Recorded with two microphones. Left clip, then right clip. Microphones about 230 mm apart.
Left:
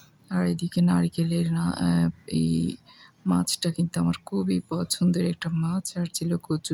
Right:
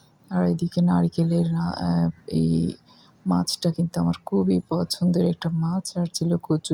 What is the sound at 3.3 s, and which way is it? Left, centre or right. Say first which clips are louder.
Speech: right 2 dB; centre.